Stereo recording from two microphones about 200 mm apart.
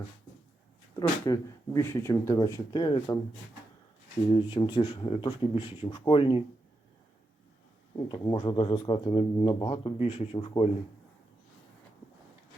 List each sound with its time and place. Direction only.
0.9 s speech: 20° left (ahead or behind)
4.3 s speech: 25° left (ahead or behind)
8.0 s speech: 20° left (ahead or behind)